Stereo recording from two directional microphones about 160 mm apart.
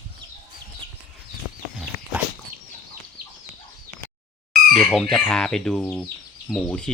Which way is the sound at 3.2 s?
65° right (ahead or behind).